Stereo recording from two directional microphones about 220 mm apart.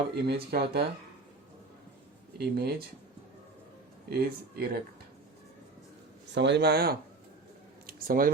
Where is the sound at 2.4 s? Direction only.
45° right (ahead or behind).